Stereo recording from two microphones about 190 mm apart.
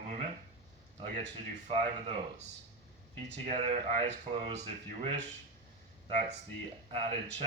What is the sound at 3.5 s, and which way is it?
Speech, 40° right (ahead or behind).